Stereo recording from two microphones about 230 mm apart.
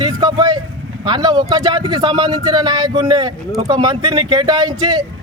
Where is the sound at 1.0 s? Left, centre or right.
Centre.